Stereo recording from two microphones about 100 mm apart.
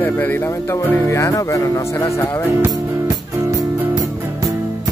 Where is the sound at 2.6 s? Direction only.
35° right (ahead or behind).